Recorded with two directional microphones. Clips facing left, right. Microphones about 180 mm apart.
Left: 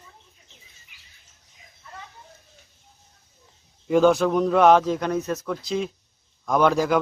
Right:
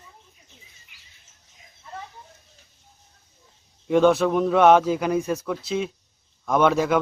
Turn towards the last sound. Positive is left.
turn(degrees=0)  # may be behind; listen again after turning